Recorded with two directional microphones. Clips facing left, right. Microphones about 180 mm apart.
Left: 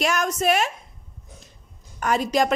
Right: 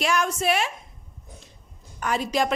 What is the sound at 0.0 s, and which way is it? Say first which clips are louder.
Speech: left 2 dB; 45° left (ahead or behind).